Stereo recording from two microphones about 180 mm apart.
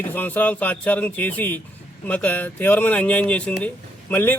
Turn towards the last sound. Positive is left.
turn(degrees=10)  # may be behind; listen again after turning